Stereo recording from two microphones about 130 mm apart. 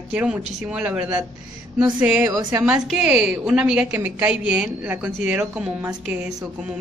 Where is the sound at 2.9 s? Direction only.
5° right (ahead or behind).